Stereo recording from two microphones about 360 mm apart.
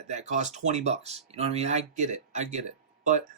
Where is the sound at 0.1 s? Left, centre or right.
Centre.